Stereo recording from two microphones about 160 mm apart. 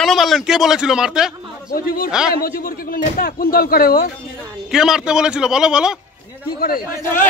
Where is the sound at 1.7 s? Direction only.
65° left (ahead or behind).